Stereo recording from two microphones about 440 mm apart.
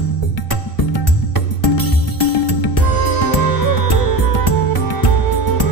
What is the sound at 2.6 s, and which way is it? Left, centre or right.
Music, left.